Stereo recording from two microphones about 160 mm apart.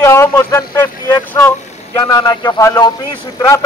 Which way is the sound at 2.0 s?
25° left (ahead or behind).